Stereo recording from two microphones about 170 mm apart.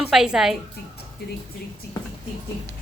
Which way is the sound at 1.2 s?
70° left (ahead or behind).